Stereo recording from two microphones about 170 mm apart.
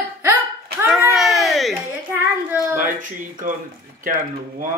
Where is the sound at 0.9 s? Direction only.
Centre (ahead or behind).